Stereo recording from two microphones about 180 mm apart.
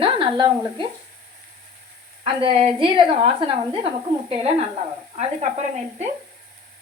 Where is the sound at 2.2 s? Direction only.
30° right (ahead or behind).